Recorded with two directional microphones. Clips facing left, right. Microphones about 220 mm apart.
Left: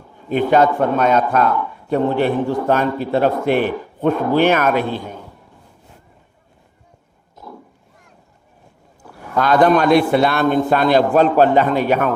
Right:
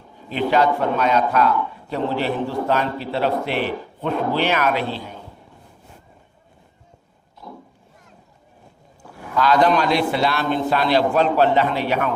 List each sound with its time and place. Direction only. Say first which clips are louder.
0.3 s a man's voice: left 4 dB; 50° left (ahead or behind)
7.4 s pig: left 2 dB; 40° left (ahead or behind)
9.3 s a man's voice: left 3 dB; 50° left (ahead or behind)